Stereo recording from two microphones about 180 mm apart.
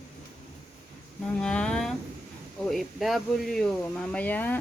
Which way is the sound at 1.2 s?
5° left (ahead or behind).